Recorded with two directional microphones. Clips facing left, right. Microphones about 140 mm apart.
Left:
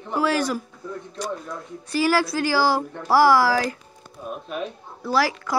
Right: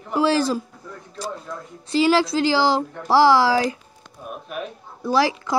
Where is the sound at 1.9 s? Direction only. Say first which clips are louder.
Right 3 dB; 25° right (ahead or behind).